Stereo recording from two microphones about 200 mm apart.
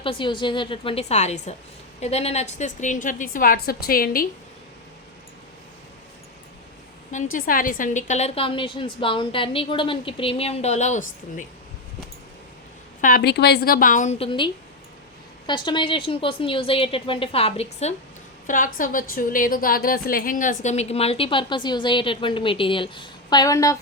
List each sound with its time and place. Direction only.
0.0 s a woman's voice: 25° left (ahead or behind); by 4.3 s 45° left (ahead or behind)
7.3 s a woman's voice: 45° left (ahead or behind)
13.0 s a woman's voice: 45° left (ahead or behind); by 23.7 s 15° left (ahead or behind)